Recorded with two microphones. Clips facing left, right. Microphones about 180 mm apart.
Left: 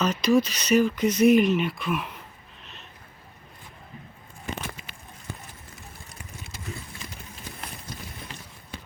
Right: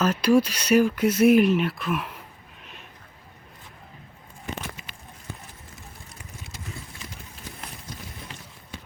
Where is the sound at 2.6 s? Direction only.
10° right (ahead or behind).